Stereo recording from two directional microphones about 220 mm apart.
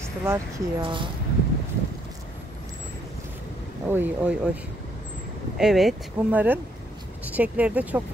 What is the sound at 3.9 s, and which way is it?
Speech, 10° right (ahead or behind).